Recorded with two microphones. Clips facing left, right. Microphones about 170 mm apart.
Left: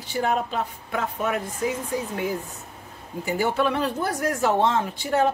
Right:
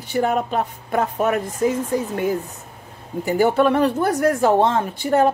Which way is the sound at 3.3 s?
50° right (ahead or behind).